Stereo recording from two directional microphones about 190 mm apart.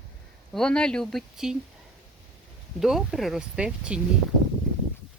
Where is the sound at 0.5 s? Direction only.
5° left (ahead or behind).